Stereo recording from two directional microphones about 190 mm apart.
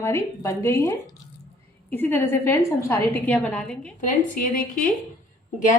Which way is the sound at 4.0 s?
45° left (ahead or behind).